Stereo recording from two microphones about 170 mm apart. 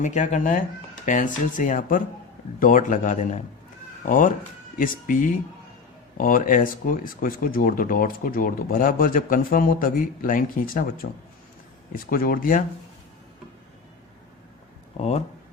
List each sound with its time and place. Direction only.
0.0 s speech: 45° left (ahead or behind)